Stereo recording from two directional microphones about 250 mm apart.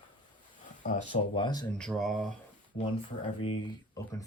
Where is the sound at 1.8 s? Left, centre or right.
Centre.